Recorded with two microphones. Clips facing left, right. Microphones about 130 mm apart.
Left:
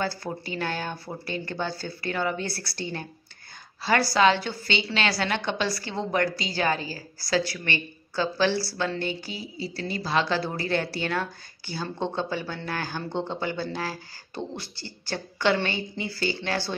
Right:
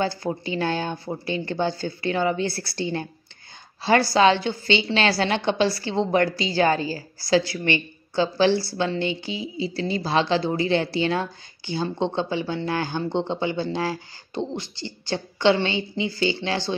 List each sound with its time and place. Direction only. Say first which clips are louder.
0.0 s speech: right 5 dB; 25° right (ahead or behind)